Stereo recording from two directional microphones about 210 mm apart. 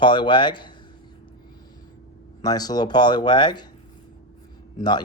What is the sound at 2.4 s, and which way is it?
Speech, 20° left (ahead or behind).